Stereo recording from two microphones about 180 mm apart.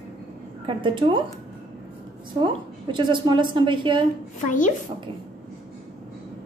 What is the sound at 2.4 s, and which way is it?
A woman's voice, 25° right (ahead or behind).